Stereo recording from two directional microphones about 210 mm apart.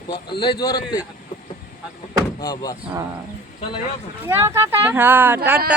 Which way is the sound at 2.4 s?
15° left (ahead or behind).